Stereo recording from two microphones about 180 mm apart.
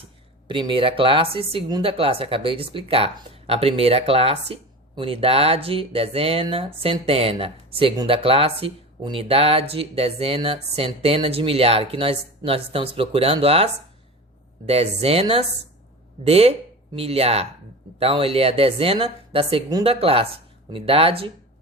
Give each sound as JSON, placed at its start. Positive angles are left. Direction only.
{"t": 0.4, "sound": "speech", "side_deg": -25}
{"t": 14.7, "sound": "speech", "side_deg": -35}